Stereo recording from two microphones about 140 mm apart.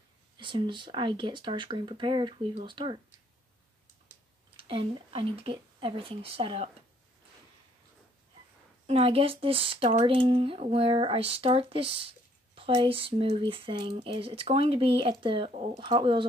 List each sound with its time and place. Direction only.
0.4 s speech: 35° right (ahead or behind)
4.6 s speech: 40° right (ahead or behind)
8.8 s speech: 45° right (ahead or behind)